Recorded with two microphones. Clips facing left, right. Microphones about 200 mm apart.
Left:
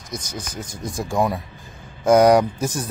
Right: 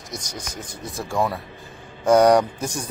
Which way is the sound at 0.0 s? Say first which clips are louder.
Left 2 dB; centre (ahead or behind).